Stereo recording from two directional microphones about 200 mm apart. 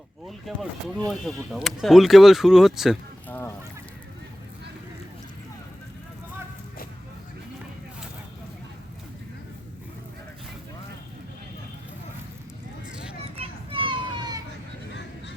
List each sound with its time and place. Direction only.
0.3 s speech: centre (ahead or behind)
3.2 s goose: 10° left (ahead or behind)
13.3 s children playing: 30° right (ahead or behind)